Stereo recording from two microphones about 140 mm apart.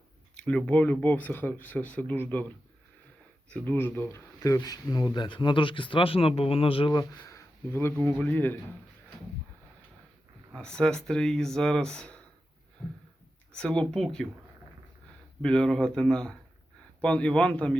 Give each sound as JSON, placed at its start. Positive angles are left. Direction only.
{"t": 0.3, "sound": "speech", "side_deg": 10}
{"t": 3.5, "sound": "speech", "side_deg": 15}
{"t": 6.9, "sound": "speech", "side_deg": 20}
{"t": 10.5, "sound": "speech", "side_deg": 5}
{"t": 13.5, "sound": "speech", "side_deg": 5}
{"t": 15.4, "sound": "speech", "side_deg": 5}